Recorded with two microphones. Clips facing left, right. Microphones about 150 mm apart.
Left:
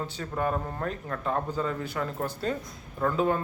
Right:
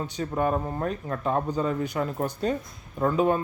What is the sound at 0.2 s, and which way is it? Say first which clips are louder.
A man's voice: right 4 dB; 20° right (ahead or behind).